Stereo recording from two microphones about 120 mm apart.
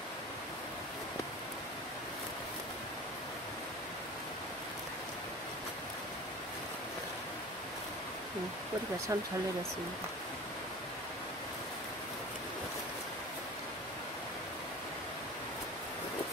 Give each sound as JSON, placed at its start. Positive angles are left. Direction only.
{"t": 9.1, "sound": "speech", "side_deg": -25}